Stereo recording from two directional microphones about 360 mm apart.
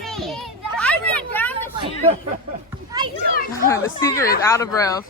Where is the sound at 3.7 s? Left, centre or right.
Centre.